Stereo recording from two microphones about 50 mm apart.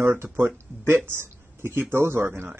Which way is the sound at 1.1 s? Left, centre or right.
Right.